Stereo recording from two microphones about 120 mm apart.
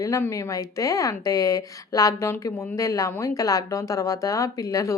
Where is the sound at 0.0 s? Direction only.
25° left (ahead or behind).